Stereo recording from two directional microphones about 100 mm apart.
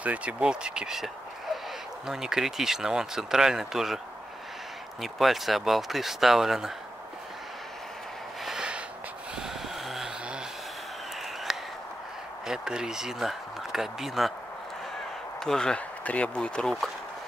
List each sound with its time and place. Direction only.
0.0 s speech: 15° right (ahead or behind)
5.0 s speech: centre (ahead or behind)
8.5 s a sound: 10° right (ahead or behind)
9.4 s vehicle: 5° right (ahead or behind)
11.5 s a sound: 5° right (ahead or behind)
12.4 s speech: 5° right (ahead or behind)
15.4 s speech: 5° left (ahead or behind)